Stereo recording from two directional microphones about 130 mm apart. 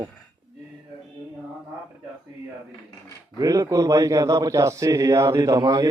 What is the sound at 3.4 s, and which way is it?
A man's voice, 25° right (ahead or behind).